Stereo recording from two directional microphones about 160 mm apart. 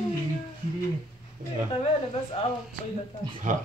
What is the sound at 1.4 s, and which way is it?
Speech, 55° right (ahead or behind).